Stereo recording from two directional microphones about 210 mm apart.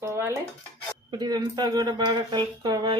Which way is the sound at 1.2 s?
20° right (ahead or behind).